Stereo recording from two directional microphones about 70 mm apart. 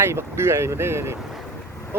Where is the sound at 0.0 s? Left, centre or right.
Right.